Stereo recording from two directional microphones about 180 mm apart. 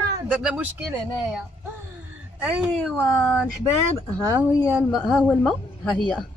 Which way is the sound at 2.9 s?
10° left (ahead or behind).